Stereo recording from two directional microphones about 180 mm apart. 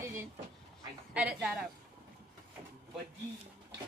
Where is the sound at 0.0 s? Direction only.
15° right (ahead or behind).